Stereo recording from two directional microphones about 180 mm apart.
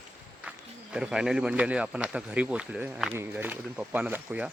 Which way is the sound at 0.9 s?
5° right (ahead or behind).